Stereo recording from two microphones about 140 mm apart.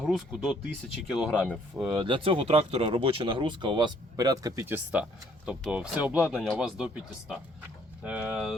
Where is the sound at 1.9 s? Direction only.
35° right (ahead or behind).